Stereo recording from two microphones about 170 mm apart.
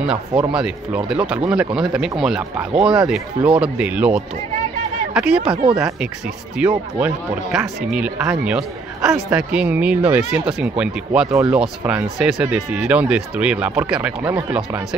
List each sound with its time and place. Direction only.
0.4 s speech: 5° right (ahead or behind)
5.4 s speech: 30° right (ahead or behind)
6.6 s speech: 10° right (ahead or behind)